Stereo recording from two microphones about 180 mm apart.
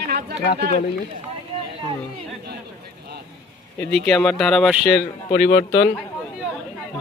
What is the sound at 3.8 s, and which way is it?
Speech, 5° left (ahead or behind).